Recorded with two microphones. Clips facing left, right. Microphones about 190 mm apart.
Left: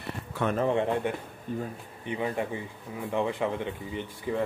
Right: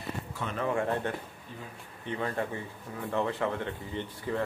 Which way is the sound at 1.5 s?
50° left (ahead or behind).